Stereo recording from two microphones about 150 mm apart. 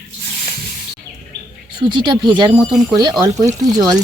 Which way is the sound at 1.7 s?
30° right (ahead or behind).